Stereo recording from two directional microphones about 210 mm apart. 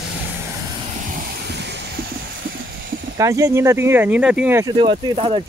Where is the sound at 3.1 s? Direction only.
15° right (ahead or behind).